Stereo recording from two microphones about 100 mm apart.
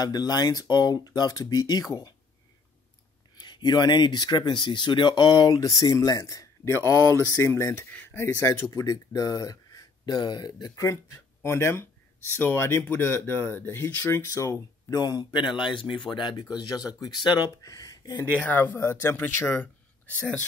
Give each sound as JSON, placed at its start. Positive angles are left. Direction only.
{"t": 0.0, "sound": "speech", "side_deg": 40}
{"t": 3.3, "sound": "speech", "side_deg": 45}
{"t": 10.1, "sound": "speech", "side_deg": 45}
{"t": 16.5, "sound": "speech", "side_deg": 40}
{"t": 18.3, "sound": "speech", "side_deg": 15}